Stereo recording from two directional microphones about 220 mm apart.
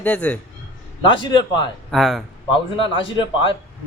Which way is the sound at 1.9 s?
Centre (ahead or behind).